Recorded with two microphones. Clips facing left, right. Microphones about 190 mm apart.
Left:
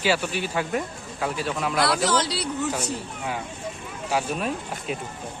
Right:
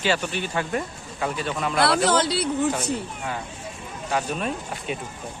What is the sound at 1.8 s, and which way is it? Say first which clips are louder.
Speech: right 3 dB; 60° right (ahead or behind).